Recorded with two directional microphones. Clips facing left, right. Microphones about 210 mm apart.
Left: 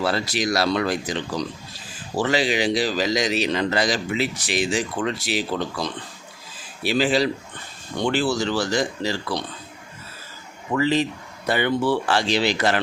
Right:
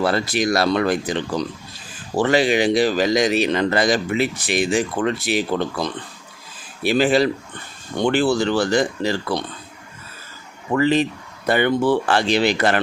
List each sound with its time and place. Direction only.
0.0 s a man's voice: 55° right (ahead or behind)
10.8 s a man's voice: 55° right (ahead or behind)